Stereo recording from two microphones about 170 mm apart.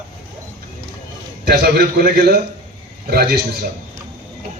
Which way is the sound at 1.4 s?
70° right (ahead or behind).